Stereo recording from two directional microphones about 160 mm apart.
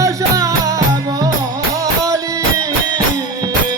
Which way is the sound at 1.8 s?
20° right (ahead or behind).